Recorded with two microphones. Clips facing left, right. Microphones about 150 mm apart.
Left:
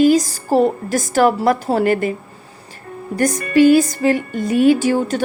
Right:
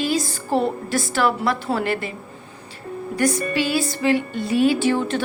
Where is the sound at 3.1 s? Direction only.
45° left (ahead or behind).